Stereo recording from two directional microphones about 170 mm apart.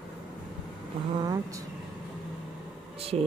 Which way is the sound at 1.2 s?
20° right (ahead or behind).